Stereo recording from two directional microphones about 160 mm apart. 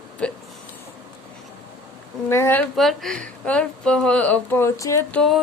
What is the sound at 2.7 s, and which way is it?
Speech, centre (ahead or behind).